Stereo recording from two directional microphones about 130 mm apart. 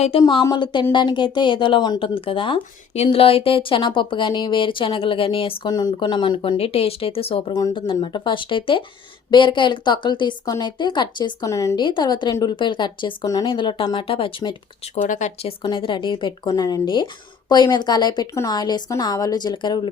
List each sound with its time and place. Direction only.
0.4 s speech: 35° left (ahead or behind)
2.9 s speech: 50° left (ahead or behind)
5.7 s speech: 35° left (ahead or behind)
15.0 s speech: 75° left (ahead or behind)
15.6 s speech: 40° left (ahead or behind)
16.5 s speech: 30° left (ahead or behind)